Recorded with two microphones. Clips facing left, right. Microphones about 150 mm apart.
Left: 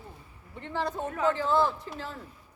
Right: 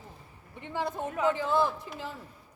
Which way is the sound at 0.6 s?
15° right (ahead or behind).